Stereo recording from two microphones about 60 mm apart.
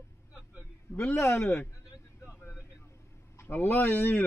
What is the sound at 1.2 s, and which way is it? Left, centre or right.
Speech, left.